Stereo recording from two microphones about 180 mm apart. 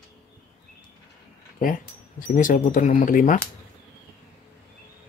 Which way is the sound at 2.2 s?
50° left (ahead or behind).